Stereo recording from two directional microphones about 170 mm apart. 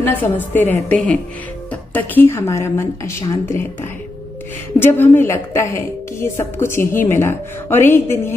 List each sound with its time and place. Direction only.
0.0 s a woman's voice: 10° left (ahead or behind)
4.7 s a woman's voice: 10° left (ahead or behind)